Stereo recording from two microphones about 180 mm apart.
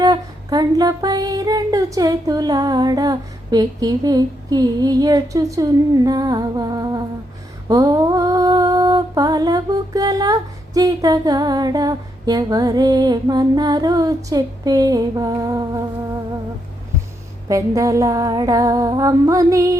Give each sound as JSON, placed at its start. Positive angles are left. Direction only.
{"t": 0.0, "sound": "music", "side_deg": -20}
{"t": 7.7, "sound": "mantra", "side_deg": -20}
{"t": 17.5, "sound": "music", "side_deg": -15}